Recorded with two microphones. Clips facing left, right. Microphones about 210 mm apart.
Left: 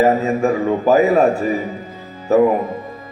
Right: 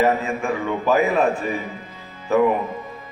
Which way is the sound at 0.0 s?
40° left (ahead or behind).